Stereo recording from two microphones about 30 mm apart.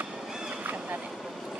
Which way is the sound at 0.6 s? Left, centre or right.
Right.